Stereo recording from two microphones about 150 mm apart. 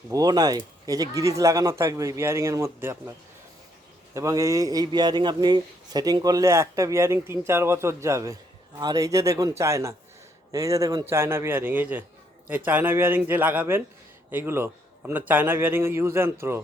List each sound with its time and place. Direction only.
0.1 s a man's voice: 25° right (ahead or behind)
4.1 s a man's voice: 20° right (ahead or behind)